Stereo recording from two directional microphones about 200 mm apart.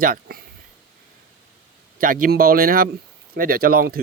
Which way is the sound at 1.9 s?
45° right (ahead or behind).